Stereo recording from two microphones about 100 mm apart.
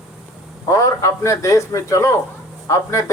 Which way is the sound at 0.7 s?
30° left (ahead or behind).